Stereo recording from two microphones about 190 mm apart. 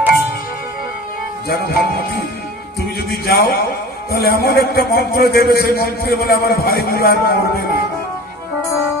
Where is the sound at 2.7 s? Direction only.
55° left (ahead or behind).